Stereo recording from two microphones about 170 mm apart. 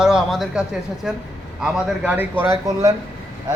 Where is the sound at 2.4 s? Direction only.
15° right (ahead or behind).